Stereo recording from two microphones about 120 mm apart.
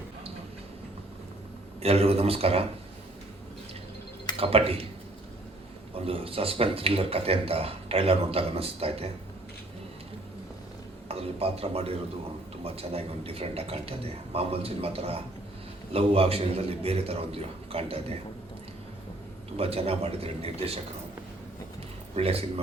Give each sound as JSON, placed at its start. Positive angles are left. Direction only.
{"t": 1.8, "sound": "a man's voice", "side_deg": -55}
{"t": 4.4, "sound": "speech", "side_deg": -50}
{"t": 5.9, "sound": "speech", "side_deg": -50}
{"t": 11.1, "sound": "a man's voice", "side_deg": -55}
{"t": 19.5, "sound": "a man's voice", "side_deg": -55}
{"t": 22.1, "sound": "a man's voice", "side_deg": -55}